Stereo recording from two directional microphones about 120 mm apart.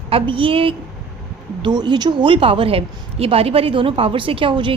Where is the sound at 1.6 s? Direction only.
40° right (ahead or behind).